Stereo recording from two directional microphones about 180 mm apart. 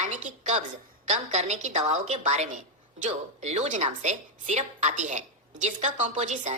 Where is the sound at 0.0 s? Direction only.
45° right (ahead or behind).